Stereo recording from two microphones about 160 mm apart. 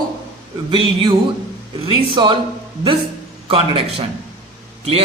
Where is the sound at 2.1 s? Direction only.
30° right (ahead or behind).